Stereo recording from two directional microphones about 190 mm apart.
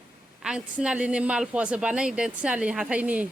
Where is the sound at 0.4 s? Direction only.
5° right (ahead or behind).